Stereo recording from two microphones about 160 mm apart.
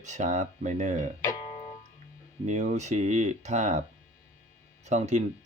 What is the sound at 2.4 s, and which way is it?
Speech, 45° right (ahead or behind).